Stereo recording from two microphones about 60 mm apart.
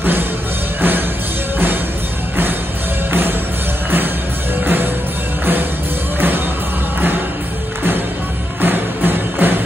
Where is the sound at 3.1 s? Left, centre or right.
Right.